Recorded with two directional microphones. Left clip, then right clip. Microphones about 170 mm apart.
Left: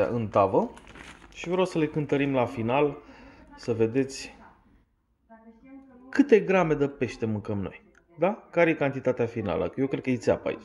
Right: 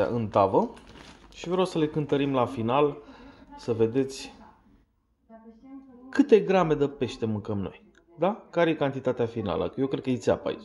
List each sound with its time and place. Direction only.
0.0 s a man's voice: centre (ahead or behind)
6.0 s a man's voice: 5° left (ahead or behind)